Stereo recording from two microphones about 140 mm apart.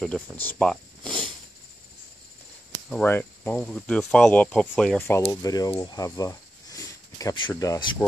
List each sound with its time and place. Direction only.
0.0 s speech: 10° left (ahead or behind)
2.9 s speech: 15° left (ahead or behind)
5.0 s speech: 20° left (ahead or behind)